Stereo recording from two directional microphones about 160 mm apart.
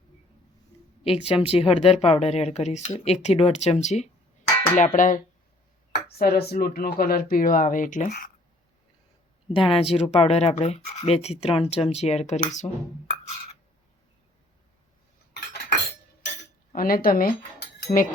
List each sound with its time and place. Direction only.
1.0 s speech: 35° left (ahead or behind)
4.8 s speech: 55° left (ahead or behind)
5.9 s speech: 70° left (ahead or behind); by 8.1 s 55° left (ahead or behind)
9.5 s speech: 35° left (ahead or behind)
16.7 s speech: 65° left (ahead or behind)
17.9 s speech: 25° left (ahead or behind)